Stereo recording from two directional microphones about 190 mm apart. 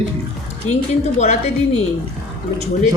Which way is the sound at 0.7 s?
35° left (ahead or behind).